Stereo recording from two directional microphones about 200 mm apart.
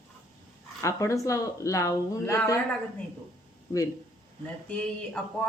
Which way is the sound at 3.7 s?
15° left (ahead or behind).